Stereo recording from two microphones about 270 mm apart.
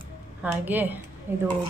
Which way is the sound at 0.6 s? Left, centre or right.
Centre.